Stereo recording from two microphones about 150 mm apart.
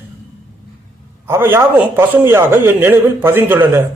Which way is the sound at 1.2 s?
15° right (ahead or behind).